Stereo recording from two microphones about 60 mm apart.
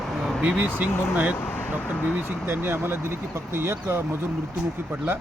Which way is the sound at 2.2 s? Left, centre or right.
Right.